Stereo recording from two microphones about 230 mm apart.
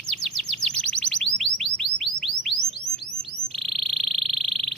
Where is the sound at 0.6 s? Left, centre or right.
Centre.